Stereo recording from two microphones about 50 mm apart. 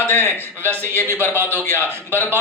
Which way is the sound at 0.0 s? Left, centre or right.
Left.